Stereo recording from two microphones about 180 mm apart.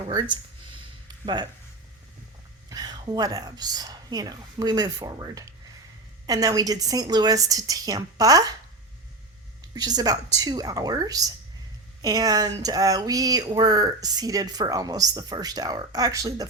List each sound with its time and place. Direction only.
0.0 s a sound: 25° right (ahead or behind)
2.6 s speech: 20° right (ahead or behind)
9.7 s speech: 20° right (ahead or behind)